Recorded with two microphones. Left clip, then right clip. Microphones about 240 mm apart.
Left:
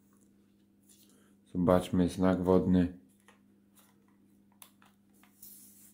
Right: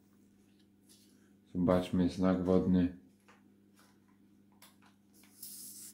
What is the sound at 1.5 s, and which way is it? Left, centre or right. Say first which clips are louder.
Speech: left 4 dB; left.